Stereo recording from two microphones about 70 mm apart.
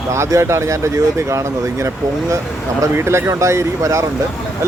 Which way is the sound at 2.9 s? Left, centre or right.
Right.